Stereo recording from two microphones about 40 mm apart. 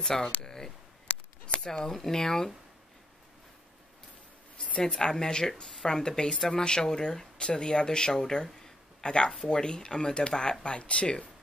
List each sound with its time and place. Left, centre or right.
0.0 s speech: centre
0.4 s a sound: centre
1.6 s speech: centre
4.6 s speech: left